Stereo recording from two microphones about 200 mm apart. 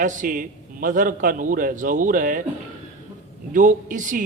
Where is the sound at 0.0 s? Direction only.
40° right (ahead or behind).